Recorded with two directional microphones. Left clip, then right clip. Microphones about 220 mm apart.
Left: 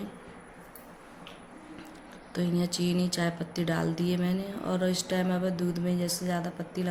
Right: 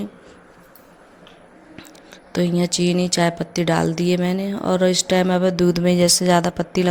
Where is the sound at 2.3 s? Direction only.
35° right (ahead or behind).